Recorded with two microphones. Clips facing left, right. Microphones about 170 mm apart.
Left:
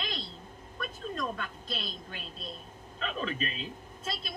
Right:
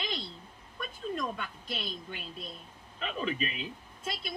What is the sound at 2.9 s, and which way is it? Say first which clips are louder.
Speech: right 1 dB; 15° right (ahead or behind).